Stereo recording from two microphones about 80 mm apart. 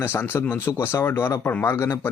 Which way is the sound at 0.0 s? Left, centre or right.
Left.